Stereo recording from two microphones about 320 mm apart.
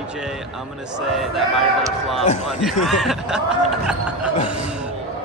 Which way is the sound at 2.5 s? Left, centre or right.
Centre.